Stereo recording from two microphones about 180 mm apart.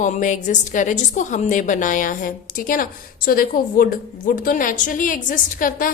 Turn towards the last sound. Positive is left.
turn(degrees=50)  # may be behind; listen again after turning